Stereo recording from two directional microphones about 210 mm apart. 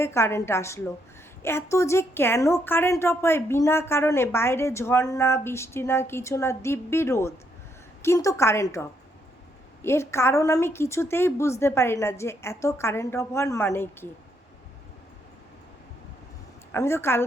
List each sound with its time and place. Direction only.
0.0 s a woman's voice: 10° left (ahead or behind)
16.7 s a woman's voice: 10° left (ahead or behind)